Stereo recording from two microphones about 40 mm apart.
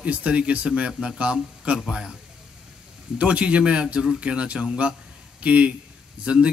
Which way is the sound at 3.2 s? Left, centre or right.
Right.